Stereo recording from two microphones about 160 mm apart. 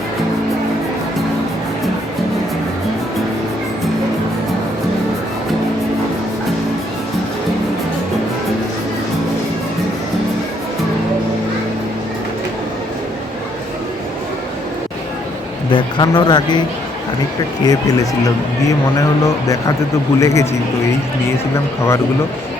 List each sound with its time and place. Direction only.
15.7 s speech: 25° left (ahead or behind)
20.1 s speech: 20° left (ahead or behind)